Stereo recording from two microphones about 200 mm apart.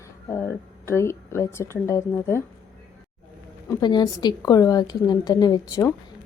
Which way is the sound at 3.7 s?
20° left (ahead or behind).